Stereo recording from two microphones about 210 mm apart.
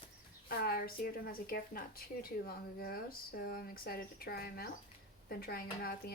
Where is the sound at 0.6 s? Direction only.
45° left (ahead or behind).